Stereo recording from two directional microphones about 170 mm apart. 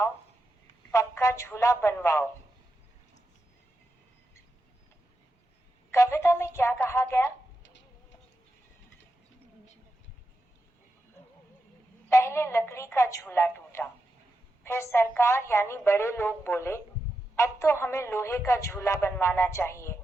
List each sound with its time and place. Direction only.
0.9 s speech: 15° left (ahead or behind)
5.9 s a sound: 15° left (ahead or behind)
7.6 s chicken: 90° left
12.0 s telephone: 15° left (ahead or behind)
14.6 s speech: 15° left (ahead or behind)